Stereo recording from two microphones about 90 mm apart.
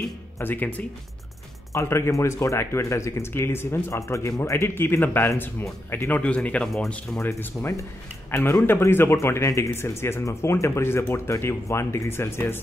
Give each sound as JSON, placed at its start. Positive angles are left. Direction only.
{"t": 0.4, "sound": "speech", "side_deg": 20}
{"t": 1.7, "sound": "speech", "side_deg": 30}
{"t": 7.2, "sound": "a man's voice", "side_deg": 30}